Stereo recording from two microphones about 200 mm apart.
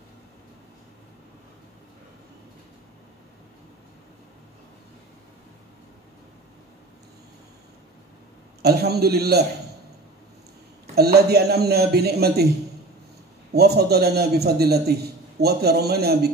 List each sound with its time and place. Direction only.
8.6 s a man's voice: 55° right (ahead or behind)
11.0 s a man's voice: 50° right (ahead or behind)
13.5 s a man's voice: 55° right (ahead or behind)